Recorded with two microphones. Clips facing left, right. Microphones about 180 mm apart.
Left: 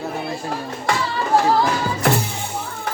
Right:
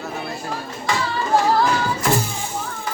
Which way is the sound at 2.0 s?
65° left (ahead or behind).